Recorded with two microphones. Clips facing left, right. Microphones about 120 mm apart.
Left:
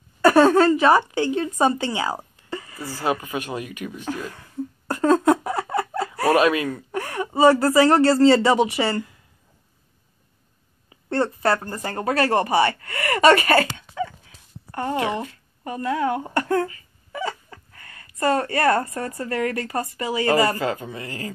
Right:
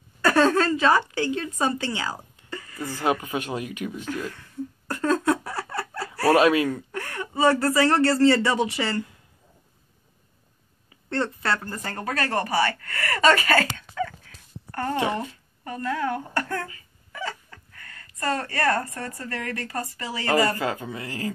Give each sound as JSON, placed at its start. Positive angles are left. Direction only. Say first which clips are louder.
{"t": 0.2, "sound": "speech", "louder": "left 5 dB", "side_deg": 20}
{"t": 2.5, "sound": "a sound", "louder": "left 5 dB", "side_deg": 20}
{"t": 3.0, "sound": "speech", "louder": "even", "side_deg": -15}
{"t": 4.1, "sound": "speech", "louder": "left 3 dB", "side_deg": 20}
{"t": 4.4, "sound": "a sound", "louder": "left 3 dB", "side_deg": 25}
{"t": 6.4, "sound": "speech", "louder": "even", "side_deg": -20}
{"t": 6.9, "sound": "speech", "louder": "left 6 dB", "side_deg": 20}
{"t": 11.1, "sound": "speech", "louder": "left 5 dB", "side_deg": 25}
{"t": 13.5, "sound": "a sound", "louder": "left 3 dB", "side_deg": 20}
{"t": 15.0, "sound": "speech", "louder": "left 1 dB", "side_deg": 15}
{"t": 20.8, "sound": "speech", "louder": "even", "side_deg": -15}